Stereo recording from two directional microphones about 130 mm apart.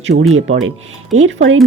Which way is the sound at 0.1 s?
90° right.